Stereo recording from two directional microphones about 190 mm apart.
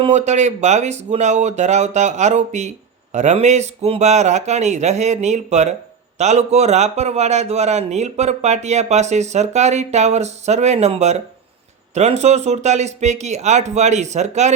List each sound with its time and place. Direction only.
0.0 s speech: 35° right (ahead or behind)